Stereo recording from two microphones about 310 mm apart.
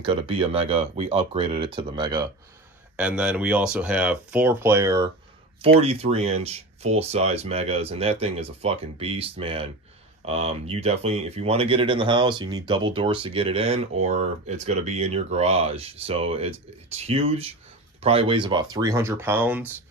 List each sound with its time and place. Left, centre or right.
0.0 s speech: centre
3.0 s speech: centre